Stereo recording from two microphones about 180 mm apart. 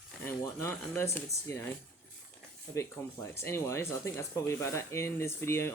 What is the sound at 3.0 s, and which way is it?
Speech, 15° left (ahead or behind).